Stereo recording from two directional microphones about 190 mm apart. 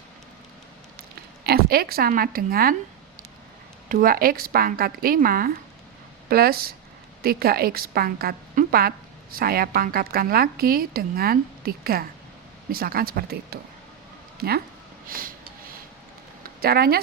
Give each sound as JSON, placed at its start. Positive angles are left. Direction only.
{"t": 1.5, "sound": "a woman's voice", "side_deg": -55}
{"t": 3.8, "sound": "a woman's voice", "side_deg": -50}
{"t": 15.0, "sound": "vehicle", "side_deg": -50}
{"t": 16.4, "sound": "a sound", "side_deg": -55}